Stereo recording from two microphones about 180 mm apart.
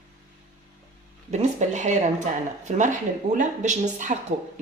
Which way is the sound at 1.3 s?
40° right (ahead or behind).